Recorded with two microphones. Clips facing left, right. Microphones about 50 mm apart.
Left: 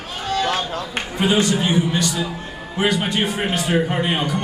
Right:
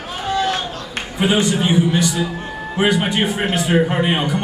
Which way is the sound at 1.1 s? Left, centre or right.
Centre.